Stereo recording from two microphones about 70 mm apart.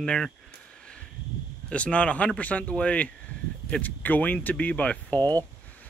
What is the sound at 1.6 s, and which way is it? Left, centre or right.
Speech, centre.